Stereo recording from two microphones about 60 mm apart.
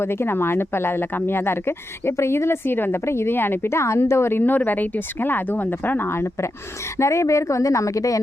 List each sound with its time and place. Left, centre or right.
0.0 s speech: left
7.0 s speech: left